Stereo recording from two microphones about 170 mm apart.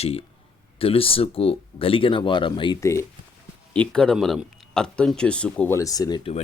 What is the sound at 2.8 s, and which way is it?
Speech, 15° left (ahead or behind).